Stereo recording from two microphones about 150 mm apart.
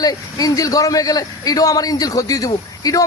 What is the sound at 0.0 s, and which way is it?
A man's voice, 25° left (ahead or behind).